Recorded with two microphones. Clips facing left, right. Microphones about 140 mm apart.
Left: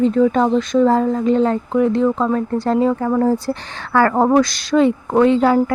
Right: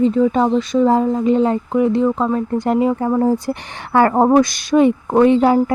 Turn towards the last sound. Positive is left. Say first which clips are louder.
# right 1 dB
turn(degrees=-20)  # may be behind; listen again after turning